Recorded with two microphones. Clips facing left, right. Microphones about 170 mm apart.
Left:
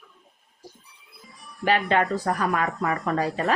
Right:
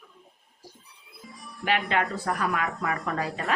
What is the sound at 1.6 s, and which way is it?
Speech, 35° left (ahead or behind).